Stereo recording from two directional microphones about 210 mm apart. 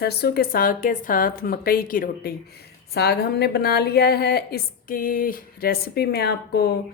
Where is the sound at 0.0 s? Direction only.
50° left (ahead or behind).